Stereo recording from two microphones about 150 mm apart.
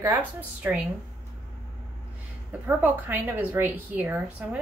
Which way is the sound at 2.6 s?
15° right (ahead or behind).